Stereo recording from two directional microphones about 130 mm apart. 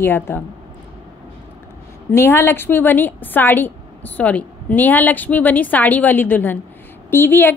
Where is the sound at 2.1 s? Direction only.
20° left (ahead or behind).